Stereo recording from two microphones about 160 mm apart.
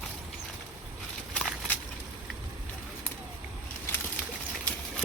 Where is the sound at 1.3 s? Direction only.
10° left (ahead or behind).